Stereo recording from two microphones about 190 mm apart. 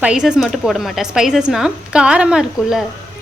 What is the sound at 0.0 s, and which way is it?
A woman's voice, 5° right (ahead or behind).